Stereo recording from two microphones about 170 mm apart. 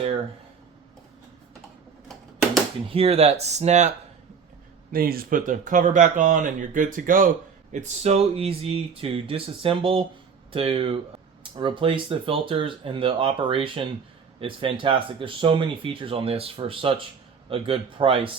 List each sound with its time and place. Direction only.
2.9 s speech: 35° right (ahead or behind)
4.9 s speech: 60° right (ahead or behind)
7.7 s speech: 40° right (ahead or behind)